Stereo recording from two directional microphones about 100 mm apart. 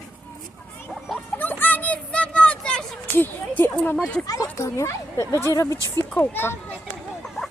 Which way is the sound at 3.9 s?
Centre (ahead or behind).